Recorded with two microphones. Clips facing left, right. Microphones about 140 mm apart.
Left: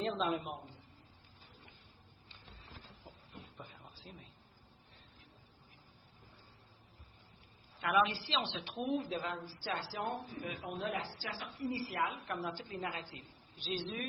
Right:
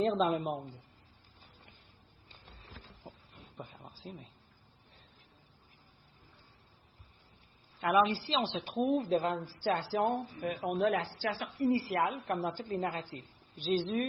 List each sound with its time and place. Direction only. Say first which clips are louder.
0.0 s a woman's voice: right 6 dB; 40° right (ahead or behind)
3.1 s a sound: right 7 dB; 40° right (ahead or behind)
4.0 s speech: right 9 dB; centre (ahead or behind)
7.8 s a woman's voice: right 4 dB; 40° right (ahead or behind); by 12.1 s 60° right (ahead or behind)
12.3 s speech: right 7 dB; 45° right (ahead or behind)